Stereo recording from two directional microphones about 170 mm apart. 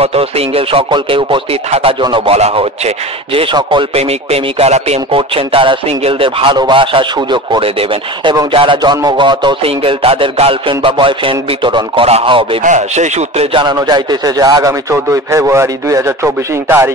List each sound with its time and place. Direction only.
0.0 s speech: 35° right (ahead or behind)
8.3 s speech: 30° right (ahead or behind)
12.6 s speech: 45° right (ahead or behind); by 16.9 s 15° right (ahead or behind)